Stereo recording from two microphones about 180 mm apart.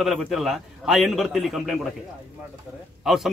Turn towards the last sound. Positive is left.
turn(degrees=0)  # may be behind; listen again after turning